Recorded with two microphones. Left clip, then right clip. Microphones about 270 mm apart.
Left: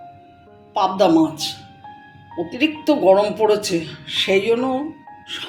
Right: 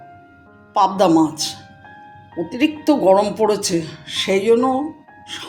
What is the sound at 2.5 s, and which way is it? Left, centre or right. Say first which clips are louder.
Speech: right 1 dB; right.